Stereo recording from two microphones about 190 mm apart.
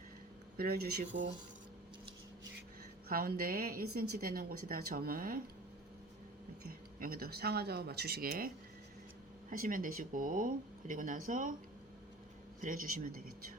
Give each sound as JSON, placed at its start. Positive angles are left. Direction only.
{"t": 0.5, "sound": "speech", "side_deg": -55}
{"t": 3.1, "sound": "a woman's voice", "side_deg": -50}
{"t": 7.0, "sound": "speech", "side_deg": -55}
{"t": 9.5, "sound": "a woman's voice", "side_deg": -45}
{"t": 12.6, "sound": "a woman's voice", "side_deg": -45}